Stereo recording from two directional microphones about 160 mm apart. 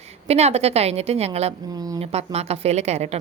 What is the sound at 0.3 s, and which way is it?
A woman's voice, 40° right (ahead or behind).